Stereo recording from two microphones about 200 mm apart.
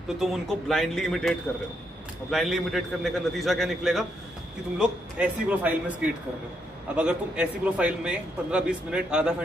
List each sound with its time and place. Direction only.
0.2 s a man's voice: centre (ahead or behind)
2.3 s a man's voice: centre (ahead or behind)
7.0 s a man's voice: 5° right (ahead or behind)